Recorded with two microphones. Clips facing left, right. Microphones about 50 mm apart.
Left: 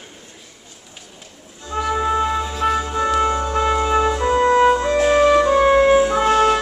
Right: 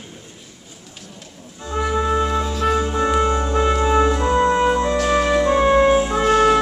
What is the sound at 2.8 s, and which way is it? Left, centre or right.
Music, centre.